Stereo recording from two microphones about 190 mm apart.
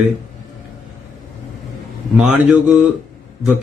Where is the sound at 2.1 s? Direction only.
5° right (ahead or behind).